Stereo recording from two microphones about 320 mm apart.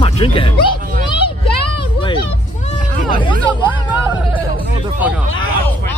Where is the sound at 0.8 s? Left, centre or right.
Right.